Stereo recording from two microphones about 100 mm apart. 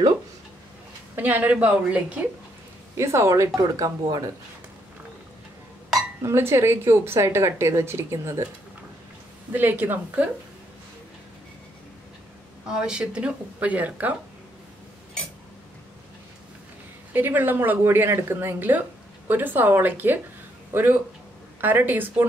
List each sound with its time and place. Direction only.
1.1 s speech: 15° right (ahead or behind)
3.0 s speech: 30° right (ahead or behind)
6.2 s a woman's voice: 25° right (ahead or behind)
9.5 s a woman's voice: 20° right (ahead or behind)
12.6 s speech: 5° right (ahead or behind)
17.1 s a woman's voice: 20° right (ahead or behind)